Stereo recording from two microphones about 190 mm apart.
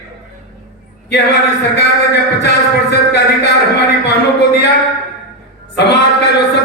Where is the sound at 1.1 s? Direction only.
65° left (ahead or behind).